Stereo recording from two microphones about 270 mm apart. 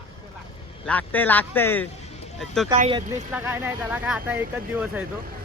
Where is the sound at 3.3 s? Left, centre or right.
Centre.